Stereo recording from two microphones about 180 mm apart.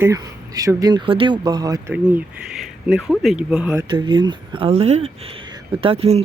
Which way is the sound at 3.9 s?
25° right (ahead or behind).